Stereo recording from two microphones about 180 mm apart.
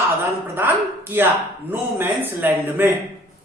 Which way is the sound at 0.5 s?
10° right (ahead or behind).